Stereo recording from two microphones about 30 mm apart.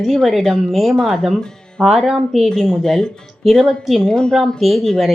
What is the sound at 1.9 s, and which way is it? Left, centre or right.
Speech, centre.